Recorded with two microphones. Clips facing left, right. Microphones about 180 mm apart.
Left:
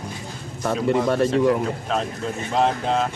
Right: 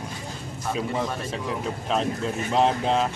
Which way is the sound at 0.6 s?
75° left (ahead or behind).